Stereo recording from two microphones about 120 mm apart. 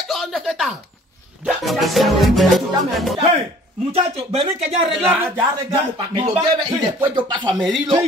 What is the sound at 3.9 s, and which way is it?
Speech, 60° right (ahead or behind).